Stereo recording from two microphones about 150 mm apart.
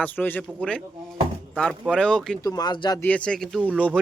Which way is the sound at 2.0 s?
5° left (ahead or behind).